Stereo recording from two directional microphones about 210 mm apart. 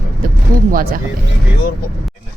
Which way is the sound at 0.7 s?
45° right (ahead or behind).